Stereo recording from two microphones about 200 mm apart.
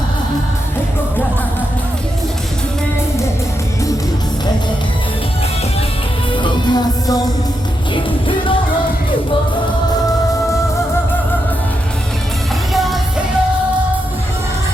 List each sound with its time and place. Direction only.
6.4 s music: 20° left (ahead or behind)
12.7 s music: centre (ahead or behind)